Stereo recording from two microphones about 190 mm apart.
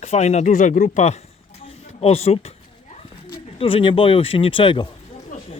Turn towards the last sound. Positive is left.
turn(degrees=25)  # may be behind; listen again after turning